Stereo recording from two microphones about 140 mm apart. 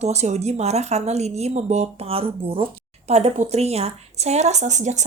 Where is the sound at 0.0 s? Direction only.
50° right (ahead or behind).